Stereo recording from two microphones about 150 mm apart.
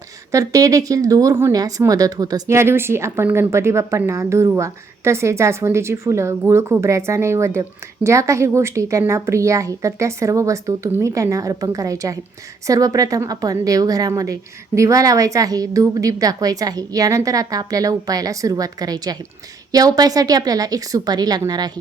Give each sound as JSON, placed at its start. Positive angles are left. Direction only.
{"t": 0.3, "sound": "a woman's voice", "side_deg": -25}